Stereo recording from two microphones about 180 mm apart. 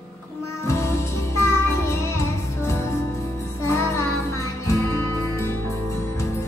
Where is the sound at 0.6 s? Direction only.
15° left (ahead or behind).